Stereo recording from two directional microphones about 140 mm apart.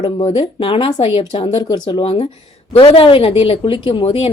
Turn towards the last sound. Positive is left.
turn(degrees=40)  # may be behind; listen again after turning